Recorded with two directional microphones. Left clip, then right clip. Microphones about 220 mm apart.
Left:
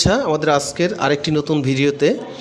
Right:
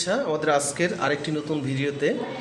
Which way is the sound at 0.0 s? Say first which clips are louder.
Left 7 dB; 40° left (ahead or behind).